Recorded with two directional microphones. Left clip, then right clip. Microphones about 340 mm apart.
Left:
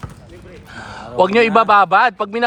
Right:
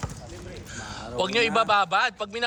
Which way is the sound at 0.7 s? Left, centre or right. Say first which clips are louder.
Left 6 dB; centre.